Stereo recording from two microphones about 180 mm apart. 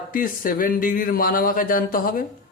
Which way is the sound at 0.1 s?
50° left (ahead or behind).